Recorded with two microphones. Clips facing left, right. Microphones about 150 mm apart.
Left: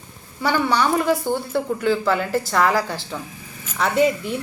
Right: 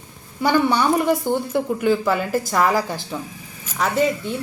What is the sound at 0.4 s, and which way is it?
A woman's voice, 20° right (ahead or behind).